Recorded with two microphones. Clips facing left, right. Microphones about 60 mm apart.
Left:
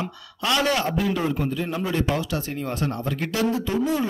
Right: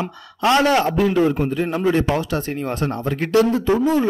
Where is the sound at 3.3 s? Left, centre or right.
Right.